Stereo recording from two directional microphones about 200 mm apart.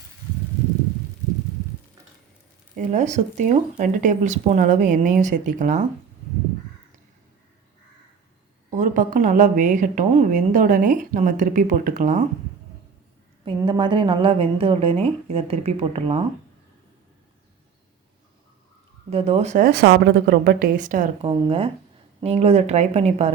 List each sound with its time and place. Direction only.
2.7 s a woman's voice: 40° right (ahead or behind)
8.7 s a woman's voice: 40° right (ahead or behind)
13.4 s a woman's voice: 25° right (ahead or behind)
19.1 s speech: 30° right (ahead or behind)
21.2 s a woman's voice: 25° right (ahead or behind)